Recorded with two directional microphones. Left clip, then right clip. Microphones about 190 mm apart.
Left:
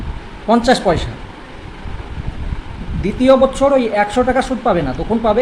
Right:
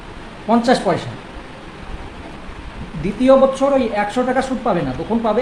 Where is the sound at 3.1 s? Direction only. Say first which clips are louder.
Left 1 dB; 25° left (ahead or behind).